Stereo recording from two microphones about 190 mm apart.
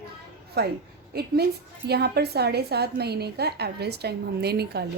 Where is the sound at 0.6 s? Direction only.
55° right (ahead or behind).